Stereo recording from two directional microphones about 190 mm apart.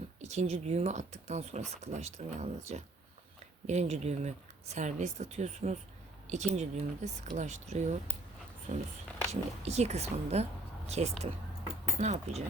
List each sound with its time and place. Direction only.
0.2 s speech: 35° right (ahead or behind)